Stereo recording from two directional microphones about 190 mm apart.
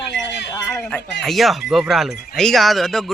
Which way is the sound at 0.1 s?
65° left (ahead or behind).